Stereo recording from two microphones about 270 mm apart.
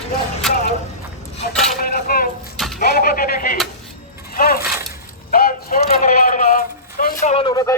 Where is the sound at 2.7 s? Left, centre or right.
Left.